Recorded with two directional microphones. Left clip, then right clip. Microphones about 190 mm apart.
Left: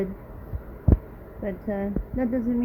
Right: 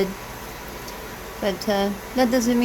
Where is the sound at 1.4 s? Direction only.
20° right (ahead or behind).